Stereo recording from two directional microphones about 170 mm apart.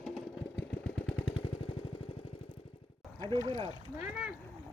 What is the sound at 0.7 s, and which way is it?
Engine, 10° left (ahead or behind).